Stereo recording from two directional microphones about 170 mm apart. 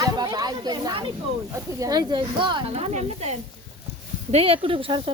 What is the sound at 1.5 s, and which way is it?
Speech, 20° right (ahead or behind).